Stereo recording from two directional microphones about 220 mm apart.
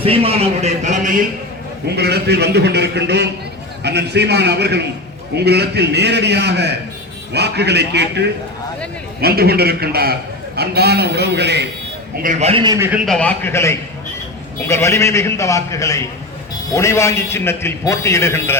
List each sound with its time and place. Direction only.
0.0 s speech: 25° right (ahead or behind)
2.0 s a man's voice: 50° right (ahead or behind)
12.1 s a man's voice: 35° right (ahead or behind); by 18.5 s 10° left (ahead or behind)